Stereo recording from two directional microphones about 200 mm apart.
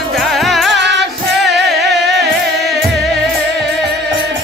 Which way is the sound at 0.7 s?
60° right (ahead or behind).